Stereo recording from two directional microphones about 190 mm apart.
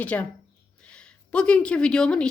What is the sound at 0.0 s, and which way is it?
A woman's voice, 5° left (ahead or behind).